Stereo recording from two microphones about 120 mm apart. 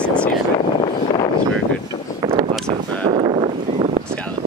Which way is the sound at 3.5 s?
70° right (ahead or behind).